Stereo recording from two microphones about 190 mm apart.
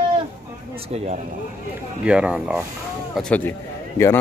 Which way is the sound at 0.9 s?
35° right (ahead or behind).